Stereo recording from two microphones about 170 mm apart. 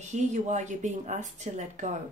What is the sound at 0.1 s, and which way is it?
Speech, 45° right (ahead or behind).